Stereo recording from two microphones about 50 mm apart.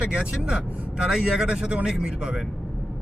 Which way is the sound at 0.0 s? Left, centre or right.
Centre.